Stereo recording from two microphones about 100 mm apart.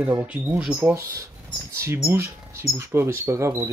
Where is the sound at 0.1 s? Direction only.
20° right (ahead or behind).